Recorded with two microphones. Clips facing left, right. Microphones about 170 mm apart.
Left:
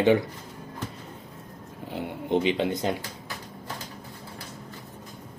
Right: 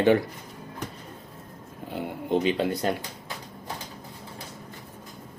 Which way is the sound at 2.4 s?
20° left (ahead or behind).